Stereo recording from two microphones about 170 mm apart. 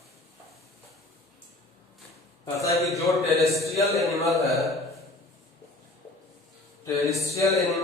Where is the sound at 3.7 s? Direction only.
20° left (ahead or behind).